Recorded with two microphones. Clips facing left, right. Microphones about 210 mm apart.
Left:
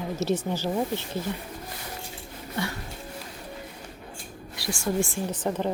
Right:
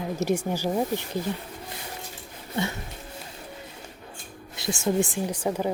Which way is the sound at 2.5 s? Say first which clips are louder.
Right 2 dB; 20° right (ahead or behind).